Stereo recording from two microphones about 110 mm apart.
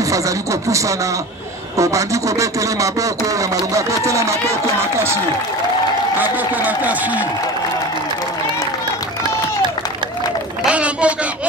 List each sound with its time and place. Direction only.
0.0 s speech: 30° right (ahead or behind)
6.1 s speech: 15° right (ahead or behind)
10.6 s a woman's voice: 10° right (ahead or behind)